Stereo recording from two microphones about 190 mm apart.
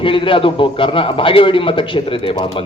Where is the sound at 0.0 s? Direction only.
25° left (ahead or behind).